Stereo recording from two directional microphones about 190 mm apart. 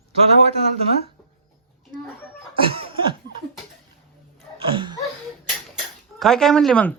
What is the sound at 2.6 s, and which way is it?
Laughter, 30° right (ahead or behind).